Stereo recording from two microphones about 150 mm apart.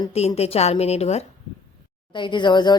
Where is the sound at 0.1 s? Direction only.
45° left (ahead or behind).